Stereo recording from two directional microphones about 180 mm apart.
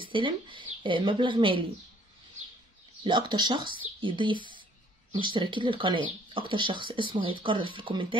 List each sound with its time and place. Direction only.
0.0 s speech: 25° right (ahead or behind)
3.0 s speech: 25° right (ahead or behind)